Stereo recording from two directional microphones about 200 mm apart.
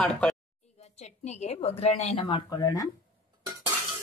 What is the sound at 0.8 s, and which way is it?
Speech, 35° left (ahead or behind).